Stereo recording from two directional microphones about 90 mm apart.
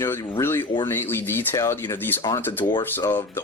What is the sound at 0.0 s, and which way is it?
Speech, 30° left (ahead or behind).